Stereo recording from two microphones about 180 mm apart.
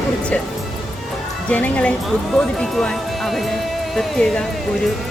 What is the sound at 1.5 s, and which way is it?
Speech, 10° left (ahead or behind).